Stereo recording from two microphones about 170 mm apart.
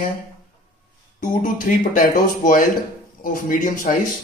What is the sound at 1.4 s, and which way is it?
Speech, 55° left (ahead or behind).